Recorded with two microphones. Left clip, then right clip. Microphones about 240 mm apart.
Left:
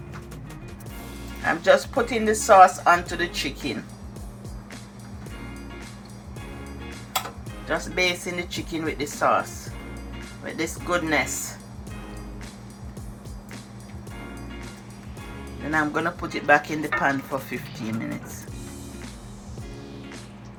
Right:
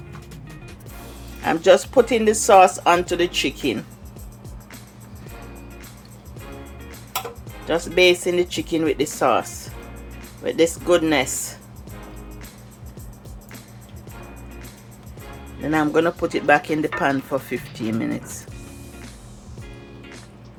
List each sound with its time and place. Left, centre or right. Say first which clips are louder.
1.5 s speech: right 4 dB; right
7.7 s speech: right 7 dB; right
15.7 s speech: right 5 dB; right